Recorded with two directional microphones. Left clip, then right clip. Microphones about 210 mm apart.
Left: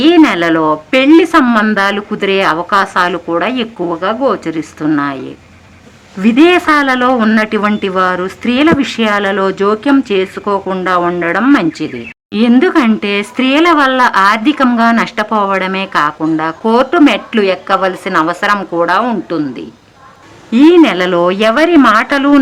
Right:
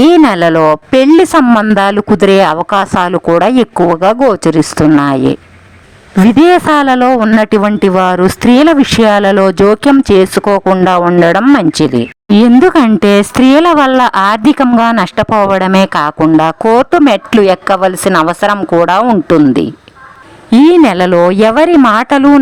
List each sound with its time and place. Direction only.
0.0 s speech: 45° right (ahead or behind)